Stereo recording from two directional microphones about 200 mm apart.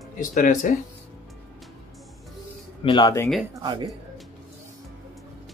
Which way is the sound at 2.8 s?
20° left (ahead or behind).